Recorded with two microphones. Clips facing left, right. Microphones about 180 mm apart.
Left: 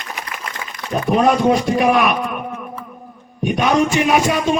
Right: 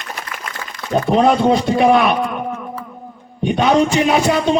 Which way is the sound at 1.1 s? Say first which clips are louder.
Right 1 dB; 30° right (ahead or behind).